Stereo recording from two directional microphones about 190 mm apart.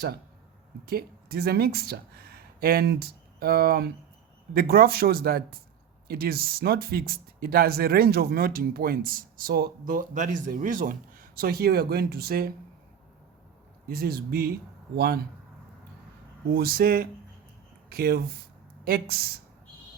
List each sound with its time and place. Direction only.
0.9 s speech: 55° right (ahead or behind)
13.8 s speech: 55° right (ahead or behind)
16.5 s speech: 50° right (ahead or behind)